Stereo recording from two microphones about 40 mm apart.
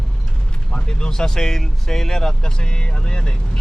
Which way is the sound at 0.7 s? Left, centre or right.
Left.